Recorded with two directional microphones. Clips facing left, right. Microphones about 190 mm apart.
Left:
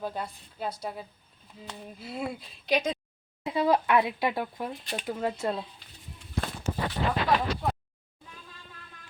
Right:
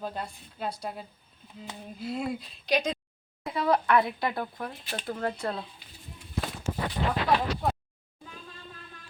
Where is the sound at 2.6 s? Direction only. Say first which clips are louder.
Left 1 dB; 5° left (ahead or behind).